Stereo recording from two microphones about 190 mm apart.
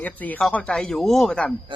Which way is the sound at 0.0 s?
10° left (ahead or behind).